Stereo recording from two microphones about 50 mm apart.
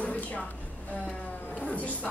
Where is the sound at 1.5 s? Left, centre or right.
Centre.